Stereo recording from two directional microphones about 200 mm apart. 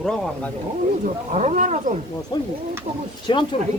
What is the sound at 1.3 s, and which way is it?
Wild animals, 35° right (ahead or behind).